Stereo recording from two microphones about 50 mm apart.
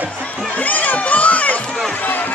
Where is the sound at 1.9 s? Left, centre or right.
Left.